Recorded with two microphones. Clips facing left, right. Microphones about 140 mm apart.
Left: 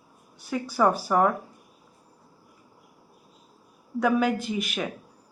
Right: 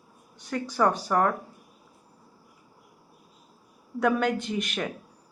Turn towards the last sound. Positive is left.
turn(degrees=5)  # may be behind; listen again after turning